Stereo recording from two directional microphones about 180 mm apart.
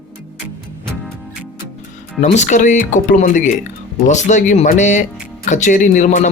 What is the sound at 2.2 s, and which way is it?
Speech, 40° left (ahead or behind).